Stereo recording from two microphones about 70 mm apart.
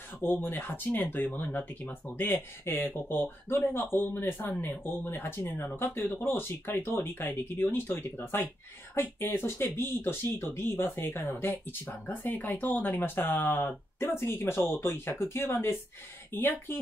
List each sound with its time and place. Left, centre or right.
0.2 s speech: left
2.3 s speech: left